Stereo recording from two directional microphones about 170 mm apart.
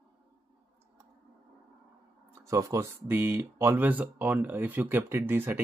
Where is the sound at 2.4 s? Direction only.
20° right (ahead or behind).